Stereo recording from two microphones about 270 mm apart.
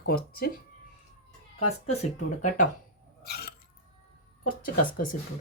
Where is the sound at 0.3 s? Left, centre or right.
Left.